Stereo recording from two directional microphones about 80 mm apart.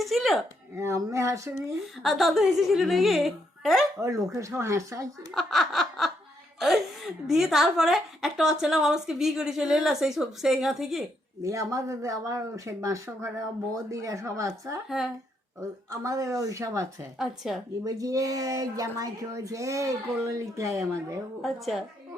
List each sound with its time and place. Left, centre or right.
0.0 s a sound: centre
0.8 s speech: right
2.0 s a woman's voice: centre
4.0 s speech: right
5.3 s laughter: centre
6.6 s a woman's voice: centre
11.4 s speech: right
14.8 s a woman's voice: centre
15.6 s speech: right
17.2 s a woman's voice: centre
17.8 s speech: right
21.4 s a woman's voice: centre